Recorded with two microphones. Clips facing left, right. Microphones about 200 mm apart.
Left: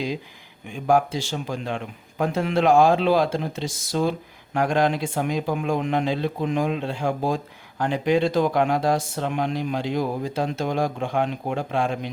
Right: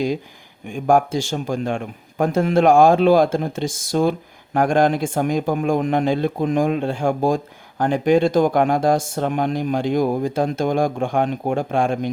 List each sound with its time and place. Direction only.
0.7 s speech: 45° right (ahead or behind)